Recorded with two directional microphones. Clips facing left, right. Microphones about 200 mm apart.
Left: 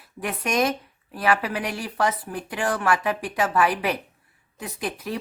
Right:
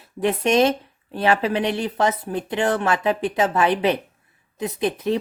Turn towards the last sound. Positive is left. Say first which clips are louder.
# right 8 dB
turn(degrees=-20)  # may be behind; listen again after turning